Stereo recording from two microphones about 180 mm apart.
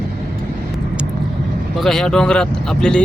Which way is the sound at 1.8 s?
Centre (ahead or behind).